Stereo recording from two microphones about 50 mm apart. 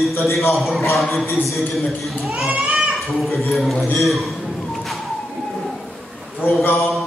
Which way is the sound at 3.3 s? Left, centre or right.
Centre.